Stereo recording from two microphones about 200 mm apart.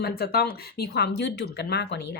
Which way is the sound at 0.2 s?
50° left (ahead or behind).